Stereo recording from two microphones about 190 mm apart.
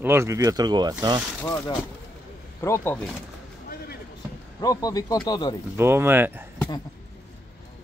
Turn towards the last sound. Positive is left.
turn(degrees=-10)  # may be behind; listen again after turning